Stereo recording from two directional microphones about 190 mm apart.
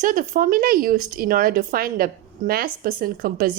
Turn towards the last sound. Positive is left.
turn(degrees=-50)  # may be behind; listen again after turning